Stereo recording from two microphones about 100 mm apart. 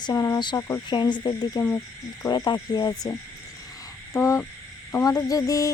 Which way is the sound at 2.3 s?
40° left (ahead or behind).